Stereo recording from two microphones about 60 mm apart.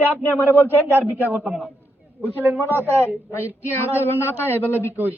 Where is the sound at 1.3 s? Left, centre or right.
Right.